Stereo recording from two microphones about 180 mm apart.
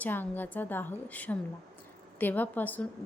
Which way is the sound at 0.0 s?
10° left (ahead or behind).